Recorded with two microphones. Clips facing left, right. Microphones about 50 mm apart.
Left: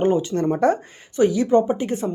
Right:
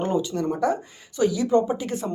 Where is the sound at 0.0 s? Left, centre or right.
Left.